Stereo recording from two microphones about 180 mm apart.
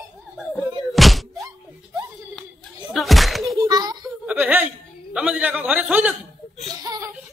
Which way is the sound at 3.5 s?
20° right (ahead or behind).